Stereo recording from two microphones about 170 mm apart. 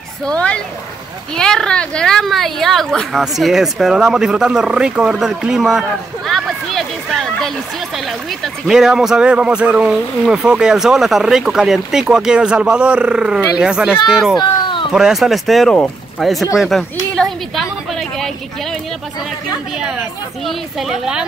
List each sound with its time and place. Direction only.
0.2 s speech: 5° left (ahead or behind)
14.4 s a sound: 30° left (ahead or behind)
14.9 s a woman's voice: 5° right (ahead or behind)
19.8 s speech: centre (ahead or behind)